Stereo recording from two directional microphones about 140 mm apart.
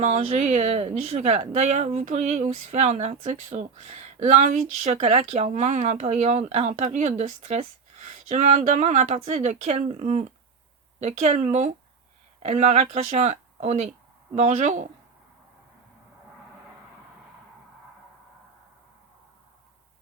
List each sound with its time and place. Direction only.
0.0 s speech: 55° right (ahead or behind)